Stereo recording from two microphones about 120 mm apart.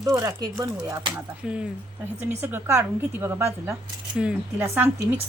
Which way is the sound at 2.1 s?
20° right (ahead or behind).